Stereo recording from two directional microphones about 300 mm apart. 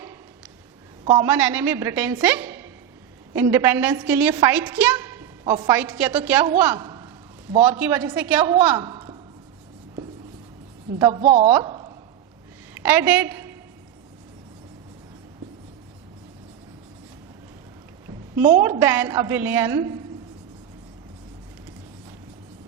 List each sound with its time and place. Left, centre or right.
1.0 s a woman's voice: centre
11.0 s a woman's voice: centre
18.4 s a woman's voice: centre